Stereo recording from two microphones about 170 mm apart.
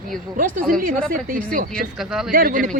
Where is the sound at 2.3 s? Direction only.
55° right (ahead or behind).